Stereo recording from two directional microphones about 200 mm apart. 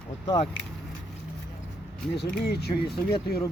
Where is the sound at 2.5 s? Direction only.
55° left (ahead or behind).